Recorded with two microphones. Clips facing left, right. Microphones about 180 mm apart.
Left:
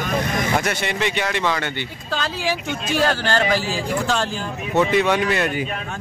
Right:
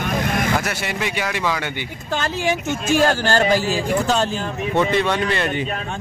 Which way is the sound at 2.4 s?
45° right (ahead or behind).